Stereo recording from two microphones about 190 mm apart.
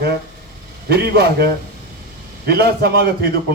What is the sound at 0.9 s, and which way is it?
Speech, 60° right (ahead or behind).